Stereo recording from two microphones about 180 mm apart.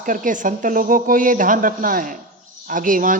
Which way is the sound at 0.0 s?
45° right (ahead or behind).